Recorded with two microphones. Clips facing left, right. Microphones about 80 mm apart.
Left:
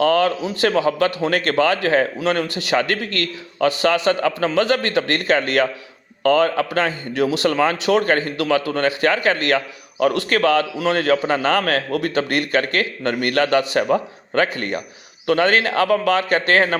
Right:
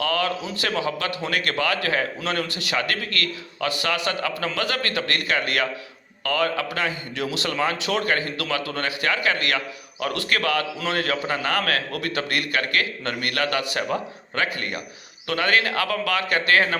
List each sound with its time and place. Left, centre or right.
0.0 s a man's voice: left